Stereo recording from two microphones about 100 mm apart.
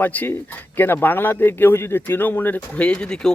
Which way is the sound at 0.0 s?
15° left (ahead or behind).